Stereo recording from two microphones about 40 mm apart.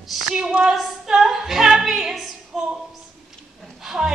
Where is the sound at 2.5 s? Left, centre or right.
Centre.